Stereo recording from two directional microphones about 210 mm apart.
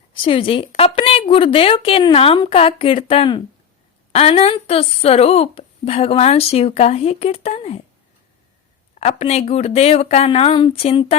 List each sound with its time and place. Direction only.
0.1 s speech: 25° left (ahead or behind)
9.0 s speech: 30° left (ahead or behind)